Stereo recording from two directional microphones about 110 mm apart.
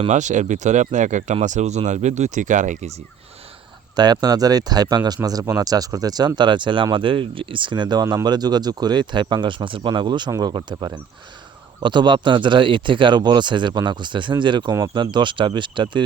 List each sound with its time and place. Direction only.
0.1 s speech: 90° right
3.9 s speech: 40° right (ahead or behind)